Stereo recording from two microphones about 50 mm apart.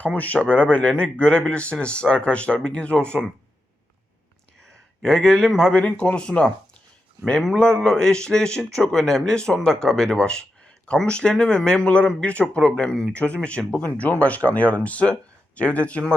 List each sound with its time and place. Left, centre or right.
0.0 s speech: left
5.0 s speech: centre
5.7 s speech: left
7.5 s speech: centre